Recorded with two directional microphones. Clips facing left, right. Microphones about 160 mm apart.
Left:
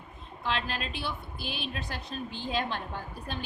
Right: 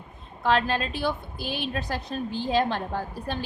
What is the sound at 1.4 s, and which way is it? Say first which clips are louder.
A woman's voice: right 6 dB; 40° right (ahead or behind).